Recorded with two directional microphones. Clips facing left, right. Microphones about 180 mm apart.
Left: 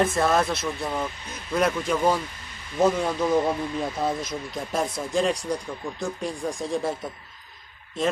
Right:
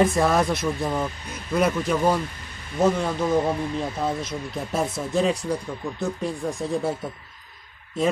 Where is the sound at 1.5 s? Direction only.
5° right (ahead or behind).